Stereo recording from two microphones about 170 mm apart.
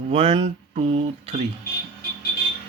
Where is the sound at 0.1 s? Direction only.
35° right (ahead or behind).